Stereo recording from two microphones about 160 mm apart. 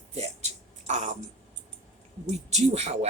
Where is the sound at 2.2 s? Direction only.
45° right (ahead or behind).